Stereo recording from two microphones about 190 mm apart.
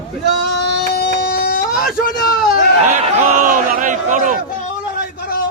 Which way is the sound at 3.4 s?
45° right (ahead or behind).